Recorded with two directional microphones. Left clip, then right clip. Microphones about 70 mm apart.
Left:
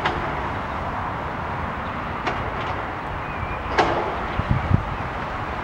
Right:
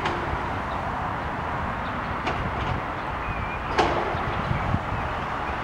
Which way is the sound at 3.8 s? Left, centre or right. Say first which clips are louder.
Left 3 dB; left.